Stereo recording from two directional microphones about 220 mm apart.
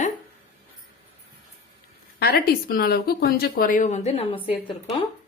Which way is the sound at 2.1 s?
40° left (ahead or behind).